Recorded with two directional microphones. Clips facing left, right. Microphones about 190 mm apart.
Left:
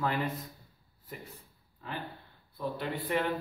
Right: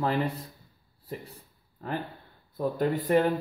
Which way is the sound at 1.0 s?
35° right (ahead or behind).